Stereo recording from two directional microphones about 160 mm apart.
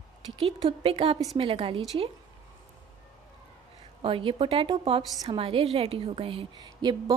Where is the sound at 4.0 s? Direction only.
35° right (ahead or behind).